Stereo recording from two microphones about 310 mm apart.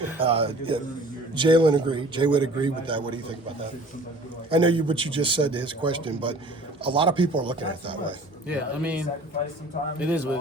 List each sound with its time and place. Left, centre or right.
0.2 s a man's voice: centre
4.4 s a man's voice: centre
8.4 s speech: centre